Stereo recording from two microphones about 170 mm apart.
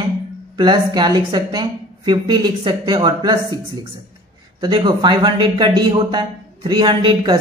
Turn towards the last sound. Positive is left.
turn(degrees=-25)  # may be behind; listen again after turning